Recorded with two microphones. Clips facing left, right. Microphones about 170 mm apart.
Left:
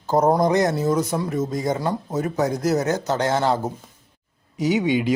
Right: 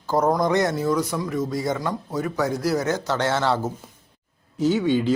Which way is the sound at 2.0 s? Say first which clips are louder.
Left 1 dB; 20° left (ahead or behind).